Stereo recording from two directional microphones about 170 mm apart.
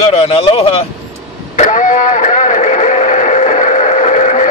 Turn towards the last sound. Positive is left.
turn(degrees=45)  # may be behind; listen again after turning